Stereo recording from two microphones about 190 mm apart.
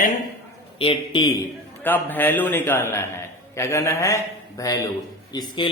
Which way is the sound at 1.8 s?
10° left (ahead or behind).